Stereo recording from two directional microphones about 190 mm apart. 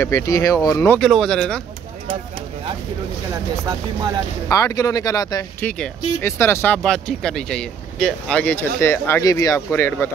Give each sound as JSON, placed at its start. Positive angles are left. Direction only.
{"t": 0.0, "sound": "speech", "side_deg": 15}
{"t": 0.9, "sound": "speech", "side_deg": 5}
{"t": 4.5, "sound": "speech", "side_deg": 20}
{"t": 5.6, "sound": "speech", "side_deg": 10}